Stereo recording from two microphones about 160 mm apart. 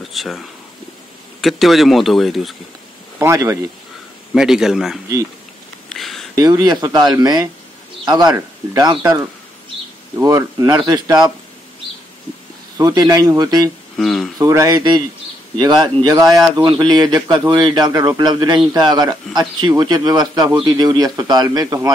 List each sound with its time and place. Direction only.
0.0 s speech: centre (ahead or behind)
3.2 s a man's voice: 20° right (ahead or behind)
4.3 s speech: 5° right (ahead or behind)
5.9 s a sound: centre (ahead or behind)
6.3 s a man's voice: 25° right (ahead or behind)
12.7 s a man's voice: 25° right (ahead or behind)
13.9 s speech: centre (ahead or behind)
14.4 s a man's voice: 20° right (ahead or behind)